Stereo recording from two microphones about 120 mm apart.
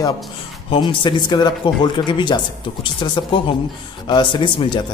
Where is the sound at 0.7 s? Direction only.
45° left (ahead or behind).